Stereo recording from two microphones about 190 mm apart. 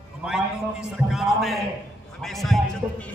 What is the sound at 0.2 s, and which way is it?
A man's voice, 5° right (ahead or behind).